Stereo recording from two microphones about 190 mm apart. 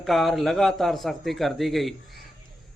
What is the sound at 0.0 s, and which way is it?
Speech, centre (ahead or behind).